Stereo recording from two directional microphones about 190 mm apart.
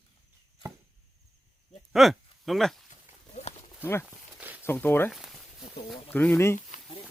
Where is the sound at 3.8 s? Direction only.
10° left (ahead or behind).